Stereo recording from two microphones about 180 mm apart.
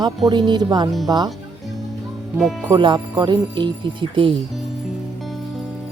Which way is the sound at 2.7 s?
25° right (ahead or behind).